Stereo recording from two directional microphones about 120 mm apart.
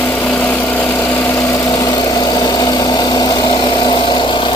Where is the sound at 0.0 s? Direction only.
15° left (ahead or behind).